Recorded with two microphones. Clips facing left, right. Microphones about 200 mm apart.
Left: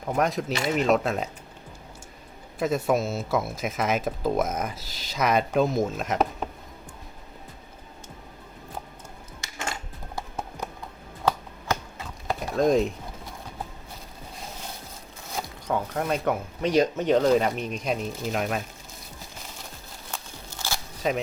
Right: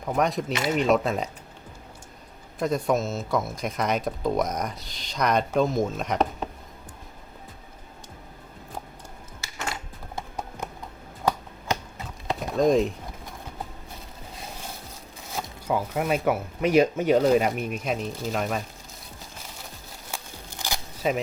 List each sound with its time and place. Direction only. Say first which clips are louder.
0.0 s speech: even; centre (ahead or behind)
2.6 s speech: even; 5° left (ahead or behind)
12.4 s a sound: right 1 dB; centre (ahead or behind)
15.6 s speech: right 2 dB; 10° right (ahead or behind)
20.1 s crackle: right 1 dB; 15° right (ahead or behind)
21.0 s speech: right 1 dB; 5° right (ahead or behind)